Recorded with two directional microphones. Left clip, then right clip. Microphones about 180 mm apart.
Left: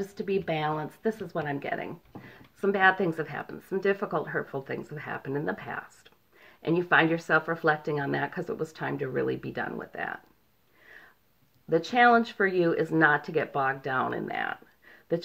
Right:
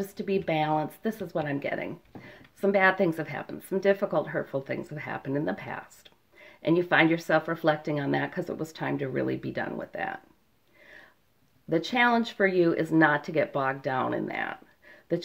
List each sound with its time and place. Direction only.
0.0 s speech: 40° right (ahead or behind)
11.7 s speech: 40° right (ahead or behind)